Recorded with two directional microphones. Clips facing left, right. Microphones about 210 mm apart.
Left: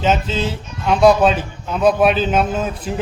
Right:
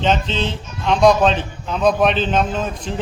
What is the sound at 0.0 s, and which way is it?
A man's voice, 5° left (ahead or behind).